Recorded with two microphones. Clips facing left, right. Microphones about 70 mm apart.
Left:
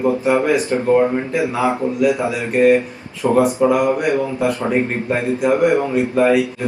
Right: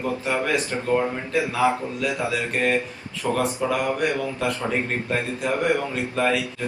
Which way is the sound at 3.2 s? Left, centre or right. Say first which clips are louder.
Left 9 dB; centre.